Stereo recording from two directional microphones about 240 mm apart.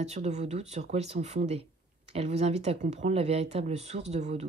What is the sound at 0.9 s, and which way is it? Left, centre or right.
Speech, right.